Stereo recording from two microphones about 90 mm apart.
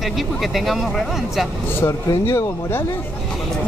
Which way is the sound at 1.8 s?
35° left (ahead or behind).